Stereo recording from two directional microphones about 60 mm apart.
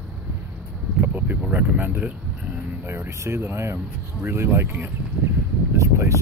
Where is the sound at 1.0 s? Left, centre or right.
Right.